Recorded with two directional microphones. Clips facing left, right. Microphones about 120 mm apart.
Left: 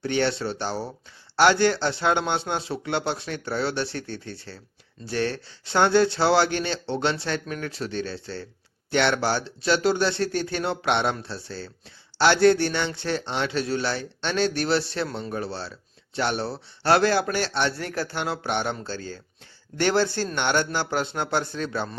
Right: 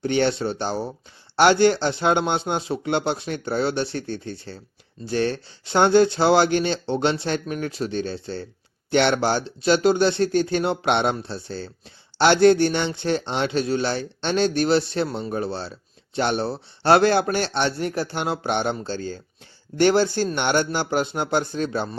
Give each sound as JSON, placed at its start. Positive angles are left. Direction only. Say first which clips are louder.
{"t": 0.0, "sound": "a man's voice", "louder": "right 3 dB", "side_deg": -20}